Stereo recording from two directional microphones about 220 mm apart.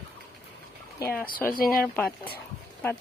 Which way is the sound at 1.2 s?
40° left (ahead or behind).